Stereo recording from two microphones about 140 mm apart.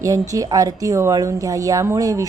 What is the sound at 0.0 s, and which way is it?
A woman's voice, 25° right (ahead or behind).